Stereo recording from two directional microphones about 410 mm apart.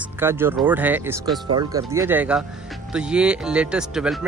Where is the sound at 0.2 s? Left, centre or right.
Centre.